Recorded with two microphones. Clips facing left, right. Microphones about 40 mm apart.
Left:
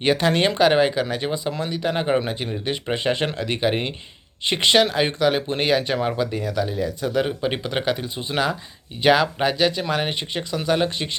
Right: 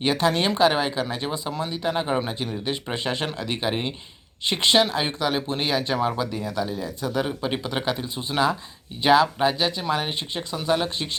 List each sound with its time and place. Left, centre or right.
0.0 s speech: left
7.3 s speech: left
7.6 s speech: left